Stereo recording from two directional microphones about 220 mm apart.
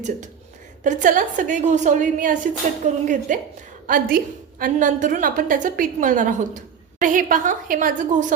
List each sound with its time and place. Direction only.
0.9 s a woman's voice: 35° right (ahead or behind)